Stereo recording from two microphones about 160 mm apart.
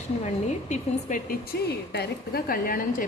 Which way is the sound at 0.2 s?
45° left (ahead or behind).